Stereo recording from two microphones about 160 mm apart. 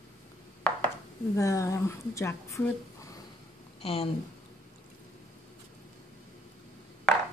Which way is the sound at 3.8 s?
35° left (ahead or behind).